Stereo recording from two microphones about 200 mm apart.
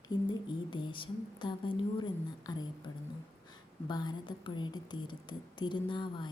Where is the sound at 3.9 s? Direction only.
20° left (ahead or behind).